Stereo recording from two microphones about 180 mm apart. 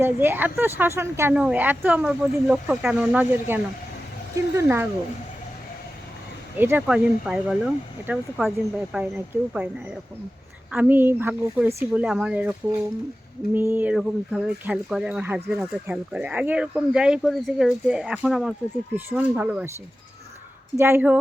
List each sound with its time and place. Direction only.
0.0 s speech: 10° right (ahead or behind)
6.6 s speech: 10° right (ahead or behind)
10.7 s speech: 10° right (ahead or behind)
13.5 s speech: 10° right (ahead or behind)
20.7 s speech: 15° right (ahead or behind)